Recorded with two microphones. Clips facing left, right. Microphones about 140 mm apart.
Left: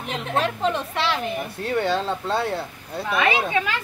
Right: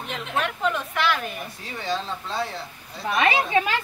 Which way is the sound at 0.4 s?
30° left (ahead or behind).